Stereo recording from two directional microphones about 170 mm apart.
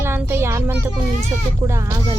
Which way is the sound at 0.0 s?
15° right (ahead or behind).